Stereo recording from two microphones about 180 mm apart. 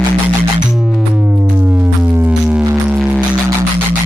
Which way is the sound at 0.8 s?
5° right (ahead or behind).